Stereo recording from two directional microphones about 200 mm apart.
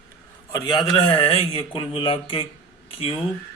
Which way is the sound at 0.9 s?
25° left (ahead or behind).